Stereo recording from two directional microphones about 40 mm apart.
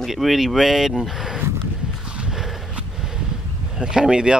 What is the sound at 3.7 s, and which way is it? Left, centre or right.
Speech, centre.